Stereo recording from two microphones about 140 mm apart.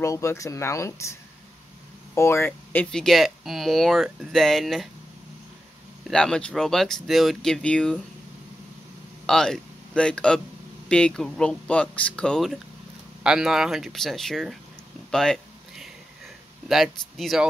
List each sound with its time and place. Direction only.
0.0 s speech: 20° left (ahead or behind)
2.1 s speech: 20° left (ahead or behind); by 4.8 s centre (ahead or behind)
6.0 s speech: 5° left (ahead or behind)
9.2 s speech: 5° left (ahead or behind)
15.0 s a sound: 5° left (ahead or behind)
16.6 s speech: centre (ahead or behind)